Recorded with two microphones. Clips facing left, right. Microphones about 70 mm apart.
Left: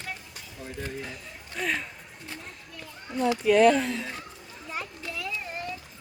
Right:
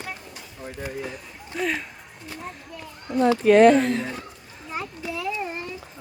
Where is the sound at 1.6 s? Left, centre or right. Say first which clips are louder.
Right 3 dB; centre.